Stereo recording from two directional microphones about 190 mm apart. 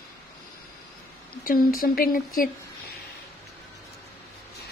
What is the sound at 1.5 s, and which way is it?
Speech, 50° left (ahead or behind).